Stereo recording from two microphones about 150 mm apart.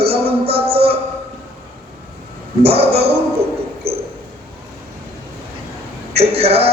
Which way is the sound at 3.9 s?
90° right.